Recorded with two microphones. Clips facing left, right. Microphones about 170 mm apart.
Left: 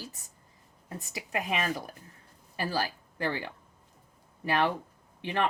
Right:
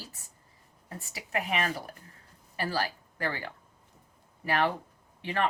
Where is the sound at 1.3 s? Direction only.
15° left (ahead or behind).